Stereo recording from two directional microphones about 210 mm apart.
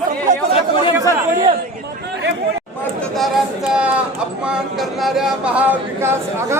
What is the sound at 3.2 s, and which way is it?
Speech, 5° right (ahead or behind).